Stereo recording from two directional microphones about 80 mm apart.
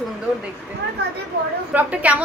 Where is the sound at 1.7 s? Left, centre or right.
Centre.